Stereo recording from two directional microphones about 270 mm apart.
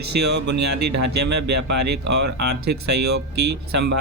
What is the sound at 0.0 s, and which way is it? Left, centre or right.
Speech, right.